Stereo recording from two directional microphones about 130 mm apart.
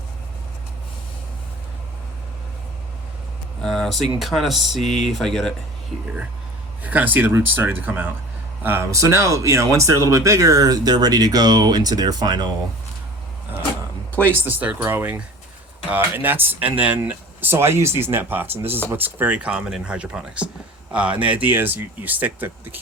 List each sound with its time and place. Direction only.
3.6 s speech: 5° left (ahead or behind)
4.8 s speech: 65° left (ahead or behind)
5.0 s speech: 5° left (ahead or behind)
6.8 s speech: 10° right (ahead or behind); by 12.5 s 30° right (ahead or behind)
14.2 s speech: 15° right (ahead or behind)